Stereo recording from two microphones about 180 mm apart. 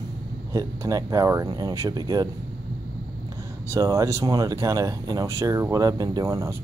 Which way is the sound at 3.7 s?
15° right (ahead or behind).